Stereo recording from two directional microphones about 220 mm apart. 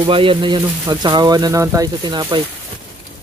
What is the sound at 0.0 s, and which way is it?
Speech, 25° right (ahead or behind).